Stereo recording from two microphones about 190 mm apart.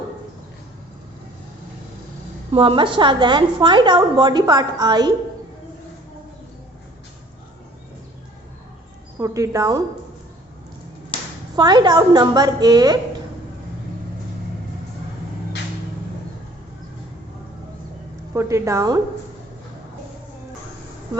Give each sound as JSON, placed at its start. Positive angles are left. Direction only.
{"t": 2.5, "sound": "a woman's voice", "side_deg": -30}
{"t": 9.1, "sound": "speech", "side_deg": -15}
{"t": 11.5, "sound": "a woman's voice", "side_deg": -20}
{"t": 18.3, "sound": "speech", "side_deg": -15}